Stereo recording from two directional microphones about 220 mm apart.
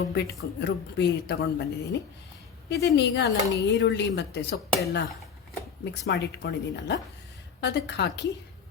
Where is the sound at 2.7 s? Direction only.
50° left (ahead or behind).